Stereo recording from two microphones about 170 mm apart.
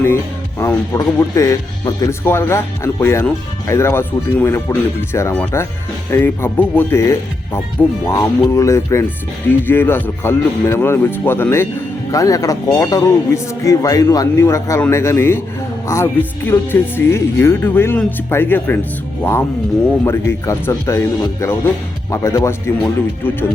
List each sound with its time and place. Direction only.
0.6 s speech: 15° left (ahead or behind)
16.5 s speech: 10° left (ahead or behind)